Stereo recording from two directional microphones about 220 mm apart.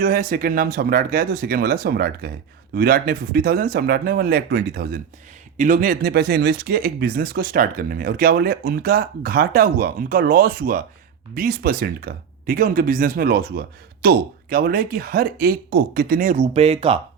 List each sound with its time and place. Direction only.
0.0 s speech: 40° right (ahead or behind); by 17.0 s 25° right (ahead or behind)